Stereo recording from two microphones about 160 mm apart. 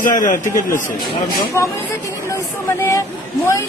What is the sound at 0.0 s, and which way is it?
Speech, 55° left (ahead or behind).